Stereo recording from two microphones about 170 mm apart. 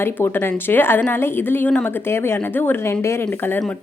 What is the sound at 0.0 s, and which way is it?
A woman's voice, 15° left (ahead or behind).